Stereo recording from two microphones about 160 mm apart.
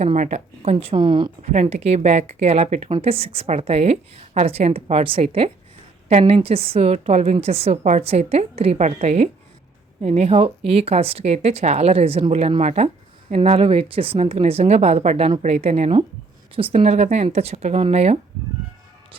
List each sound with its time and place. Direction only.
0.0 s speech: 45° right (ahead or behind); by 1.3 s 30° right (ahead or behind)
1.4 s a woman's voice: 45° right (ahead or behind)